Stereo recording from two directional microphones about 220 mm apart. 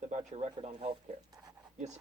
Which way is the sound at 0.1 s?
30° right (ahead or behind).